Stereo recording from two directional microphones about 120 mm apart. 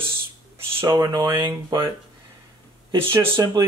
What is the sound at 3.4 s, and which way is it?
Speech, 30° right (ahead or behind).